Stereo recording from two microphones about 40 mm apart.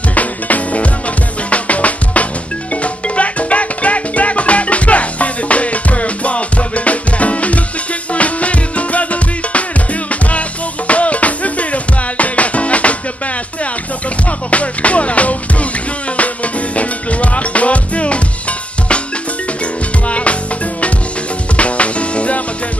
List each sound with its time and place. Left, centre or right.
0.1 s music: left
10.9 s music: left
14.5 s music: left
16.7 s music: left
20.1 s music: left
21.5 s music: left